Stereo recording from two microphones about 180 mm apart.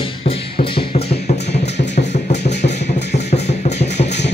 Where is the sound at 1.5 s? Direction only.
70° left (ahead or behind).